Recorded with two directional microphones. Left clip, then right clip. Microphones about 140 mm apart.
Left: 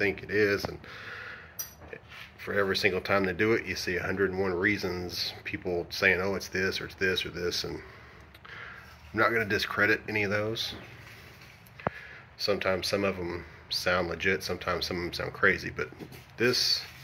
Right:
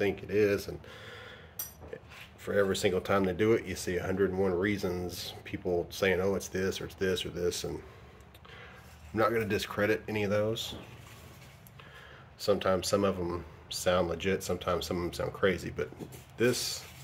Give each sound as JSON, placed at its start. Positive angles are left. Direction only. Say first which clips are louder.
{"t": 0.0, "sound": "speech", "louder": "left 2 dB", "side_deg": -25}
{"t": 2.4, "sound": "speech", "louder": "left 1 dB", "side_deg": -20}
{"t": 9.1, "sound": "speech", "louder": "left 3 dB", "side_deg": -25}
{"t": 12.4, "sound": "speech", "louder": "even", "side_deg": -35}